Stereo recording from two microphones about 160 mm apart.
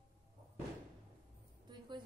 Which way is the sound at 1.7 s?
30° right (ahead or behind).